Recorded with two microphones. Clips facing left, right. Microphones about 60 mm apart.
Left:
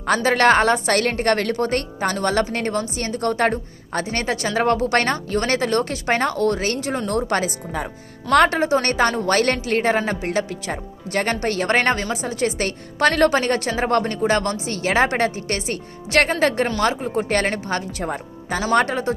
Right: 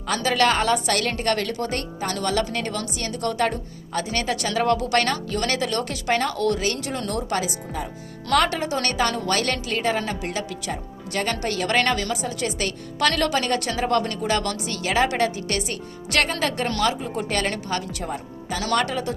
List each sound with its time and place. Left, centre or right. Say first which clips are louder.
0.0 s a woman's voice: left 4 dB; left
8.4 s a woman's voice: left 6 dB; left